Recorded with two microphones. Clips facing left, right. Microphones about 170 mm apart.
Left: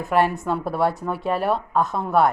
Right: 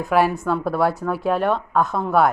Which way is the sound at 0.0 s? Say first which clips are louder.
Right 2 dB; centre (ahead or behind).